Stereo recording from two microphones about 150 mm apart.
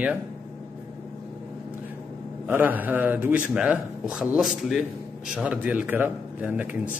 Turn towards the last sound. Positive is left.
turn(degrees=-10)  # may be behind; listen again after turning